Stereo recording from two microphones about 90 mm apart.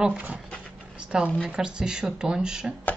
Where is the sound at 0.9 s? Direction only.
10° right (ahead or behind).